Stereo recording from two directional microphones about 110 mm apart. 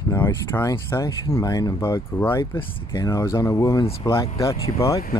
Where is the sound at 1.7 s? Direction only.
25° left (ahead or behind).